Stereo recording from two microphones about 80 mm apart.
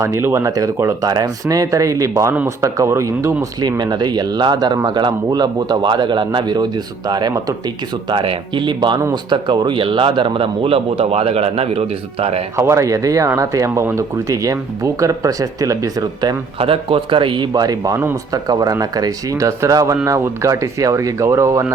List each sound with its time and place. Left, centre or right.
0.0 s speech: right
1.0 s speech: right
3.6 s speech: right
8.1 s speech: right
12.5 s speech: right
17.1 s speech: right